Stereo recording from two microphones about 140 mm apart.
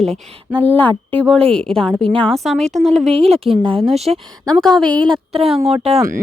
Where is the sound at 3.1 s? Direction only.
45° right (ahead or behind).